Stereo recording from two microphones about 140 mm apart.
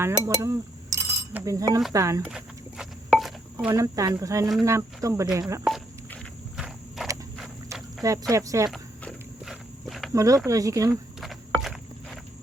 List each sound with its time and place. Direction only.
0.0 s speech: 25° right (ahead or behind)
2.3 s a sound: 5° right (ahead or behind)
3.7 s speech: 25° right (ahead or behind)
6.6 s walk: centre (ahead or behind)
8.3 s speech: 20° right (ahead or behind)
8.7 s walk: centre (ahead or behind)
10.1 s speech: 25° right (ahead or behind)
11.6 s walk: centre (ahead or behind)